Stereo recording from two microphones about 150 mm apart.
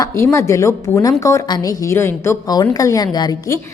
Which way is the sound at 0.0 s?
20° left (ahead or behind).